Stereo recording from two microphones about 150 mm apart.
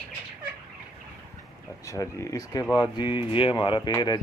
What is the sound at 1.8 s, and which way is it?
Speech, 20° left (ahead or behind).